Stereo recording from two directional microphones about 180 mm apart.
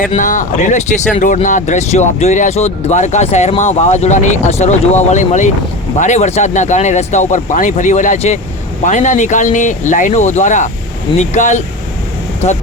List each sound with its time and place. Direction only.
0.0 s speech: 45° left (ahead or behind)